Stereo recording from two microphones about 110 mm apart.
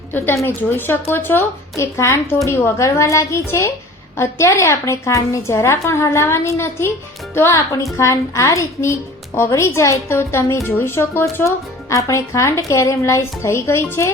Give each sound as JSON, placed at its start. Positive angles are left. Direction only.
{"t": 0.4, "sound": "a woman's voice", "side_deg": 20}